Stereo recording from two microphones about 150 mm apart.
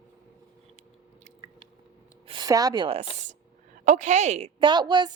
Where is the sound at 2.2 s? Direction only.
35° right (ahead or behind).